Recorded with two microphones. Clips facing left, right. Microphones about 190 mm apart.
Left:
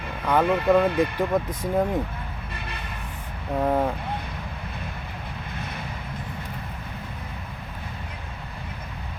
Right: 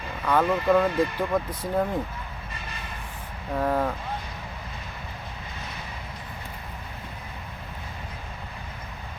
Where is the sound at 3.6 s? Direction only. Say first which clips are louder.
Left 2 dB; 15° left (ahead or behind).